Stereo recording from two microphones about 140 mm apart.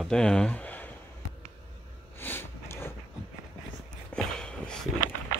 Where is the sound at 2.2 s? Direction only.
15° left (ahead or behind).